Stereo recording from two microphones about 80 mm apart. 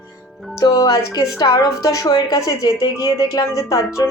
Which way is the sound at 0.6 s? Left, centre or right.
Left.